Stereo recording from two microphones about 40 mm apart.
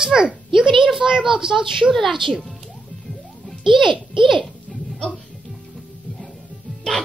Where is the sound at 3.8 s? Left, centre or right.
Centre.